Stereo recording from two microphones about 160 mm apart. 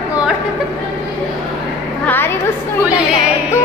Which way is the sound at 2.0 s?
15° left (ahead or behind).